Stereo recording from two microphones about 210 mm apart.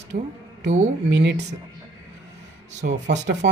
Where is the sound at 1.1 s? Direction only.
55° right (ahead or behind).